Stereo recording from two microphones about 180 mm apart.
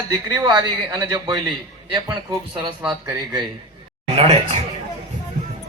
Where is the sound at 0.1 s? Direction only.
20° right (ahead or behind).